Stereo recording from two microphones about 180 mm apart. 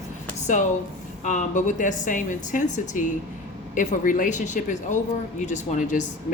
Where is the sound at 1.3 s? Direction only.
45° left (ahead or behind).